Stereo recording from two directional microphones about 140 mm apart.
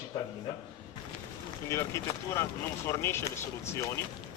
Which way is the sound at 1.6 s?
20° left (ahead or behind).